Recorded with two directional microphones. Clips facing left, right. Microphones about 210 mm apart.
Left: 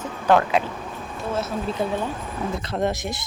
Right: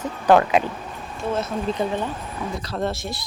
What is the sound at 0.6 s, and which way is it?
Speech, 15° right (ahead or behind).